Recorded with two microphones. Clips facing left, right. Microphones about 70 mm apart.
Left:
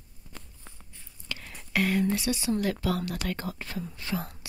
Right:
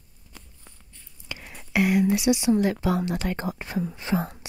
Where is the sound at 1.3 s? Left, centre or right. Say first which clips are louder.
Right 1 dB; centre.